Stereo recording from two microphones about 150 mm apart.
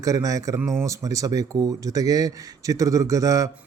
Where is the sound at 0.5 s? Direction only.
Centre (ahead or behind).